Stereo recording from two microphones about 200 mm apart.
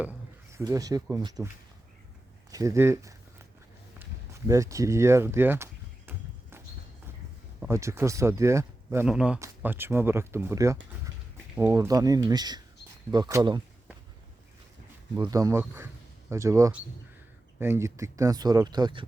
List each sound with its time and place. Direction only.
0.5 s speech: 15° right (ahead or behind)
2.5 s speech: 15° right (ahead or behind)
4.4 s speech: 15° right (ahead or behind)
7.7 s speech: 15° right (ahead or behind)
15.1 s speech: 15° right (ahead or behind)